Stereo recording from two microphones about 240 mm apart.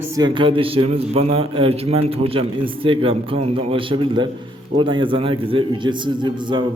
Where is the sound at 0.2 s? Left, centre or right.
Right.